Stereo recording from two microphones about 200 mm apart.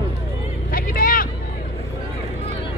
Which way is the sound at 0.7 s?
45° left (ahead or behind).